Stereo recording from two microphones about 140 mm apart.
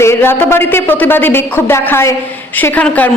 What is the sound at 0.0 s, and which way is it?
A woman's voice, 15° left (ahead or behind).